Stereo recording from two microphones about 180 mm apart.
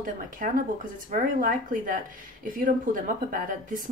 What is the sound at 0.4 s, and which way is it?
A woman's voice, 45° right (ahead or behind).